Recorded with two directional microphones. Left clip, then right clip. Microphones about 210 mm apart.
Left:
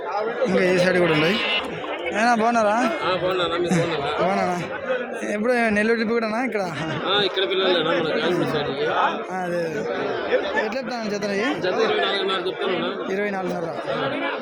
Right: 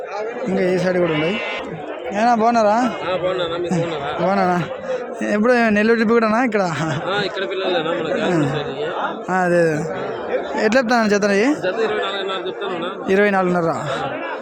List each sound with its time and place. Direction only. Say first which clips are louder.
0.6 s speech: right 2 dB; 15° right (ahead or behind)
2.1 s speech: right 4 dB; 15° right (ahead or behind)
2.8 s speech: right 1 dB; 5° right (ahead or behind)
4.3 s a man's voice: right 5 dB; 25° right (ahead or behind)
7.1 s speech: left 4 dB; 10° right (ahead or behind)
9.3 s a man's voice: right 9 dB; 40° right (ahead or behind)
13.1 s speech: right 9 dB; 45° right (ahead or behind)